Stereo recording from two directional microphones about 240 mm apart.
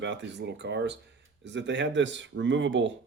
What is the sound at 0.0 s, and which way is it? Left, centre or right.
Speech, right.